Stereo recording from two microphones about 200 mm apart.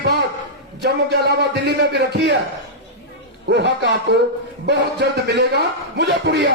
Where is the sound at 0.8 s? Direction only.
55° right (ahead or behind).